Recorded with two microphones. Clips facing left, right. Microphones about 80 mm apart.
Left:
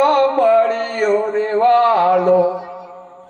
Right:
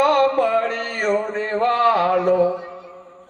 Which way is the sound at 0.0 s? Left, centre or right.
Left.